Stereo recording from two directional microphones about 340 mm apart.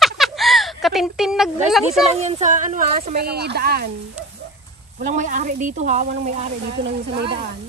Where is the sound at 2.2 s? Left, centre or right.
Right.